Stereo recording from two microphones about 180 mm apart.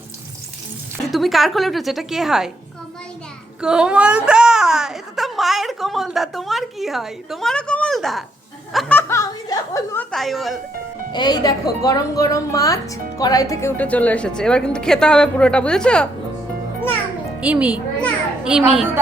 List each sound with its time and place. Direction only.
1.1 s a woman's voice: centre (ahead or behind)
3.6 s a woman's voice: 5° right (ahead or behind)
9.0 s speech: 15° left (ahead or behind)
11.1 s a woman's voice: 25° left (ahead or behind); by 16.0 s 5° left (ahead or behind)
17.4 s a child's voice: 5° right (ahead or behind)